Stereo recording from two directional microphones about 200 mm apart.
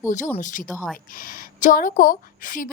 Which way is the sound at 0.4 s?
40° left (ahead or behind).